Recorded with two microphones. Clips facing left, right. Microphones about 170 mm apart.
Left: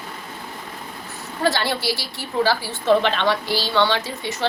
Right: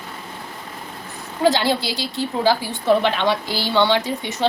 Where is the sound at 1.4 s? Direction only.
15° right (ahead or behind).